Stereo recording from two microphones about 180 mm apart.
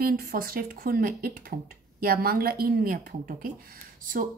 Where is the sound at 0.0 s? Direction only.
55° right (ahead or behind).